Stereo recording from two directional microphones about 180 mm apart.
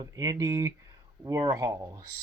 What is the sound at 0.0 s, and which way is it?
Speech, 20° right (ahead or behind).